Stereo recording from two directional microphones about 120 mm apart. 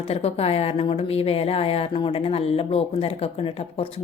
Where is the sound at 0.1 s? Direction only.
60° left (ahead or behind).